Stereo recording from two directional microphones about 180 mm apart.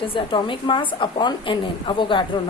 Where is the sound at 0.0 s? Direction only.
30° left (ahead or behind).